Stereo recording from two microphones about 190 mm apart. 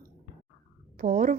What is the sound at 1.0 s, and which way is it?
Speech, 45° right (ahead or behind).